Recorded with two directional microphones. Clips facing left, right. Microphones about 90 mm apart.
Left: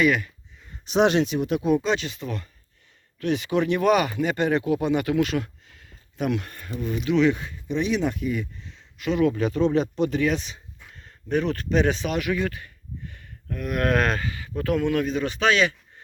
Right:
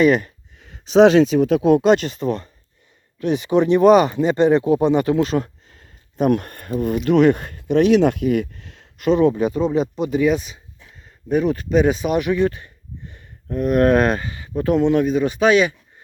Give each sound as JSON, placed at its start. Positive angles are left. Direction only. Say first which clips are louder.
{"t": 0.0, "sound": "speech", "louder": "right 6 dB", "side_deg": -35}
{"t": 1.6, "sound": "speech", "louder": "right 8 dB", "side_deg": -70}
{"t": 2.0, "sound": "speech", "louder": "right 9 dB", "side_deg": -35}
{"t": 3.2, "sound": "speech", "louder": "right 6 dB", "side_deg": -20}
{"t": 9.0, "sound": "speech", "louder": "right 8 dB", "side_deg": -40}
{"t": 9.2, "sound": "speech", "louder": "right 4 dB", "side_deg": -20}